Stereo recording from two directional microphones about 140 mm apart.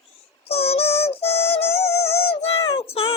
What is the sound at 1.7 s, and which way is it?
Music, 20° left (ahead or behind).